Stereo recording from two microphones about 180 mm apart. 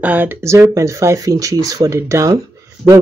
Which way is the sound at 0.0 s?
10° right (ahead or behind).